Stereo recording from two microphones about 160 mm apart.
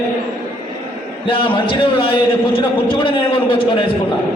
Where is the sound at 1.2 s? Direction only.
30° left (ahead or behind).